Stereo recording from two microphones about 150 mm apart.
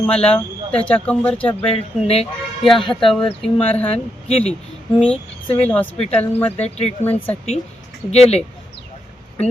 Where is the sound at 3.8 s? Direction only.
45° left (ahead or behind).